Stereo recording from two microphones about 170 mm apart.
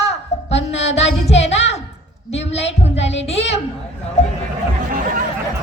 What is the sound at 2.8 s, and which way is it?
Speech, 40° left (ahead or behind).